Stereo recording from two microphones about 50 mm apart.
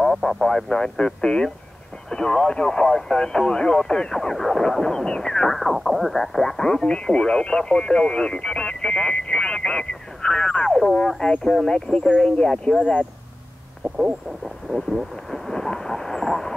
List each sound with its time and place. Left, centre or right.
0.0 s speech: centre
5.6 s speech: centre
14.4 s speech: centre
15.3 s speech: centre